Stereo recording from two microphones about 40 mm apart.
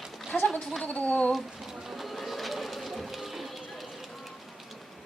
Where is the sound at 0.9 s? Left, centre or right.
Left.